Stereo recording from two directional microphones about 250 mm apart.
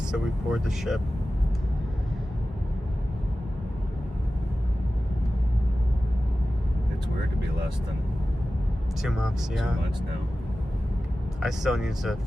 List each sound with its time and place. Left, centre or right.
0.1 s speech: centre
9.0 s speech: centre
11.3 s speech: centre